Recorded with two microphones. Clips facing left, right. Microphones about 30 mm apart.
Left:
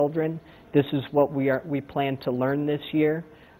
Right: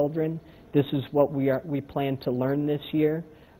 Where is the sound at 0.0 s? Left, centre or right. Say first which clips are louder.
Left 2 dB; left.